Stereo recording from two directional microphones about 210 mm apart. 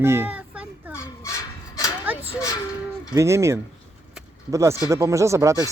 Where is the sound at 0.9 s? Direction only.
15° left (ahead or behind).